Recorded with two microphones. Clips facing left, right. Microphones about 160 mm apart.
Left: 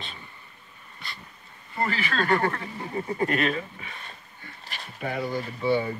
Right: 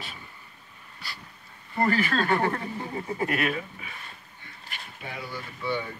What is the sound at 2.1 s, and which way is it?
Speech, 10° right (ahead or behind).